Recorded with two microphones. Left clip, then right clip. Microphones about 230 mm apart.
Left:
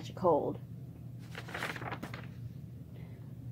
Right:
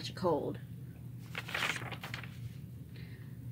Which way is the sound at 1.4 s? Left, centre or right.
Centre.